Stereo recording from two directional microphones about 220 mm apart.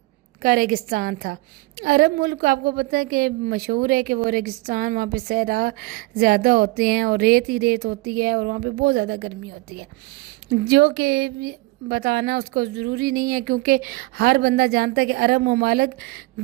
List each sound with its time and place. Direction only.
0.4 s a woman's voice: 40° right (ahead or behind)
10.5 s a woman's voice: 45° right (ahead or behind)